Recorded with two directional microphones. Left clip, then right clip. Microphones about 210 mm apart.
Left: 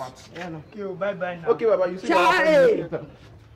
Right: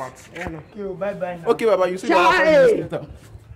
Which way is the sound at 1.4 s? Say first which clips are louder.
Right 3 dB; 55° right (ahead or behind).